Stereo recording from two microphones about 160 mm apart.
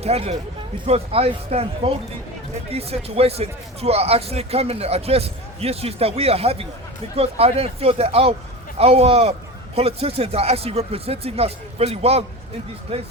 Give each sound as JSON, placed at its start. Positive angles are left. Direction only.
{"t": 0.0, "sound": "speech", "side_deg": -40}